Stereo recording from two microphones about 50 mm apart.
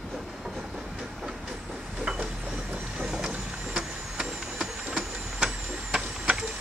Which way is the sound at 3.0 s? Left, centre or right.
Centre.